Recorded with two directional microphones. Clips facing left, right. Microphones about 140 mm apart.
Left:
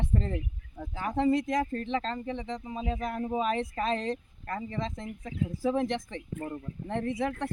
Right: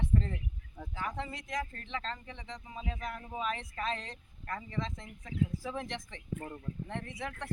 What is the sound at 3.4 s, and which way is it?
Speech, 35° left (ahead or behind).